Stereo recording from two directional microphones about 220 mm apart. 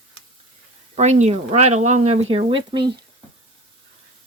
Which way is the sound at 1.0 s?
30° right (ahead or behind).